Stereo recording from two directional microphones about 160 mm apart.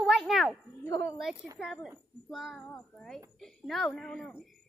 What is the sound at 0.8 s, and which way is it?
Speech, 20° left (ahead or behind).